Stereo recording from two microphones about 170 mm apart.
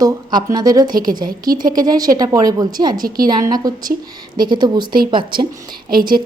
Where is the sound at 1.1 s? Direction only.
25° right (ahead or behind).